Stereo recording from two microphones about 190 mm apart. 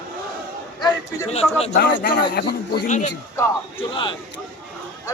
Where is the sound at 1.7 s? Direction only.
60° left (ahead or behind).